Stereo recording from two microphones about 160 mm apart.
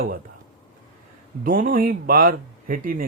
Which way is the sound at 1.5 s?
60° right (ahead or behind).